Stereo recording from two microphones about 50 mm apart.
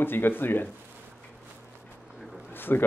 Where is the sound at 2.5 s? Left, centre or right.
Left.